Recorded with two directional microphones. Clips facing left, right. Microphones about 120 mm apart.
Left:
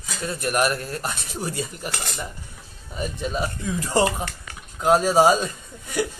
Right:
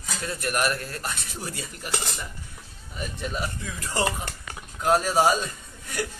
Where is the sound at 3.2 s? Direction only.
20° left (ahead or behind).